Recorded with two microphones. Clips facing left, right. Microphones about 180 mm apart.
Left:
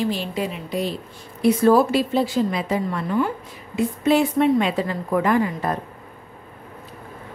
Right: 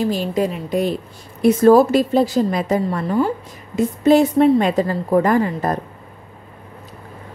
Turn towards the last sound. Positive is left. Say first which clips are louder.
# right 3 dB
turn(degrees=-40)  # may be behind; listen again after turning